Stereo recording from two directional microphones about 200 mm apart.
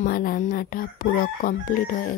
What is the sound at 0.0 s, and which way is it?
Speech, 45° left (ahead or behind).